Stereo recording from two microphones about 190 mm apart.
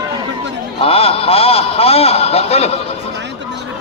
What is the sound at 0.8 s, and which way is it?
A man's voice, 30° left (ahead or behind).